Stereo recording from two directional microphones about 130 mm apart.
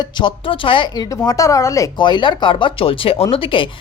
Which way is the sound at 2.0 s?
35° left (ahead or behind).